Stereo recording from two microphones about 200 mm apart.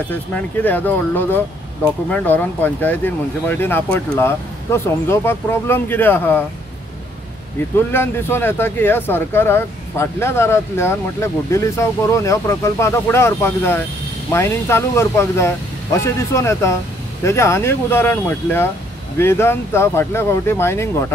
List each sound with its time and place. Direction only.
0.1 s speech: 10° left (ahead or behind)
7.9 s speech: 10° left (ahead or behind)